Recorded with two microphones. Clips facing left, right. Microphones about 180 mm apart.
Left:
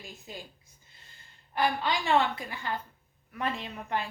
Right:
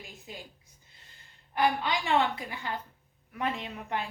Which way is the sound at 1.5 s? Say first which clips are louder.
Right 1 dB; 15° right (ahead or behind).